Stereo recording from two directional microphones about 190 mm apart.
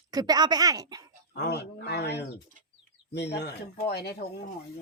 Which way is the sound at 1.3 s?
60° left (ahead or behind).